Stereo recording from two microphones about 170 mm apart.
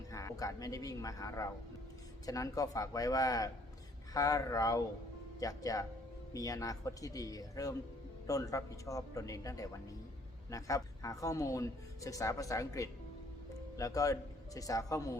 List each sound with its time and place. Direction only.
0.1 s speech: 20° left (ahead or behind)